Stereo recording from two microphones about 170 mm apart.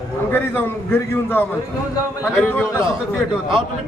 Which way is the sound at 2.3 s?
Centre (ahead or behind).